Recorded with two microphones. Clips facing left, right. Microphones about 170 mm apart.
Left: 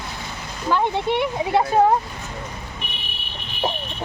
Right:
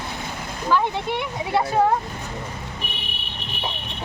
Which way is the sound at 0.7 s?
20° left (ahead or behind).